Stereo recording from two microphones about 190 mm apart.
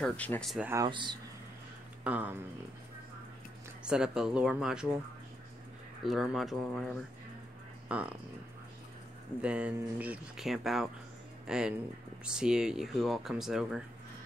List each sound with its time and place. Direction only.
0.0 s speech: 5° left (ahead or behind)
0.7 s speech: 20° right (ahead or behind)
2.0 s speech: 10° right (ahead or behind)
3.8 s speech: 5° right (ahead or behind)
6.0 s speech: centre (ahead or behind)
7.9 s speech: 5° right (ahead or behind)
9.4 s speech: 5° right (ahead or behind)